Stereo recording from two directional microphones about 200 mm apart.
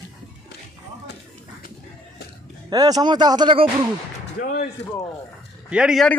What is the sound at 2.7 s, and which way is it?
Speech, 20° right (ahead or behind).